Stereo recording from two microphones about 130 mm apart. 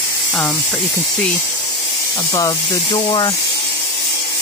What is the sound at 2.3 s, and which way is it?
Speech, 25° left (ahead or behind).